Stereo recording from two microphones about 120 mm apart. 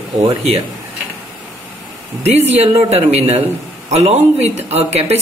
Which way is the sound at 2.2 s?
65° right (ahead or behind).